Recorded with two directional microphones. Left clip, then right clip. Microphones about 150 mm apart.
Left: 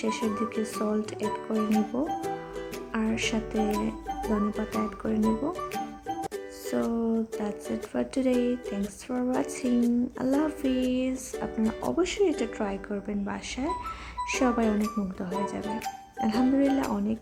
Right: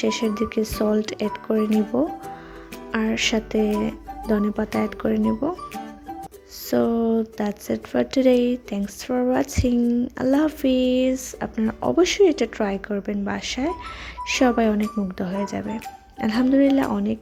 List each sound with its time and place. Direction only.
0.0 s music: 25° right (ahead or behind)
1.9 s speech: 35° right (ahead or behind)
2.9 s music: 30° right (ahead or behind)
6.7 s music: 30° right (ahead or behind)